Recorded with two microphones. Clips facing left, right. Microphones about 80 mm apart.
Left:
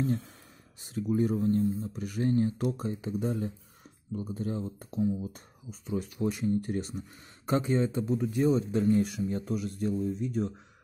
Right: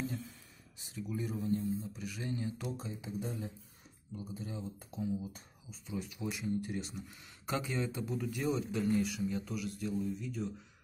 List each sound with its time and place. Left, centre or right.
0.0 s speech: left